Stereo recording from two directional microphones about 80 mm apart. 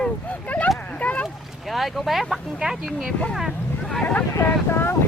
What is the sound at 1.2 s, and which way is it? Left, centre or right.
Speech, centre.